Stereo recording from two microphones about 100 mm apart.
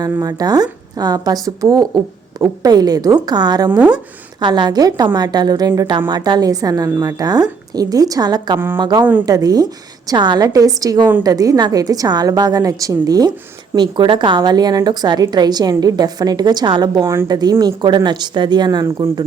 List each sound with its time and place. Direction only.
0.0 s a woman's voice: 40° right (ahead or behind)
3.7 s speech: 15° right (ahead or behind)
4.4 s a woman's voice: 50° right (ahead or behind)
8.5 s speech: 20° right (ahead or behind)
8.8 s a woman's voice: 45° right (ahead or behind)
17.0 s speech: 30° right (ahead or behind)
17.2 s speech: 40° right (ahead or behind)